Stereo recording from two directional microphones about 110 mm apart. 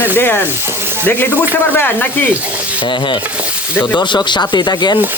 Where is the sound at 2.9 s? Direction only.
45° left (ahead or behind).